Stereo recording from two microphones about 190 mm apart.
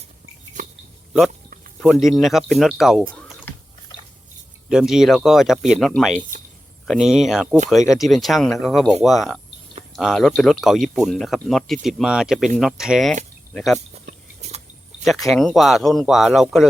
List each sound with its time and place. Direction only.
1.8 s speech: centre (ahead or behind)
3.1 s typing: 5° left (ahead or behind)
4.7 s speech: centre (ahead or behind)
13.7 s a sound: 35° right (ahead or behind)
15.0 s speech: centre (ahead or behind)